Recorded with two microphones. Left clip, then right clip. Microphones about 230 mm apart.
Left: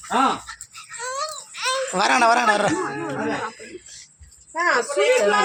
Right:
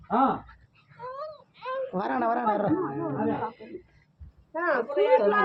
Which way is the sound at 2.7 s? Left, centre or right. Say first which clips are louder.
Left 3 dB; left.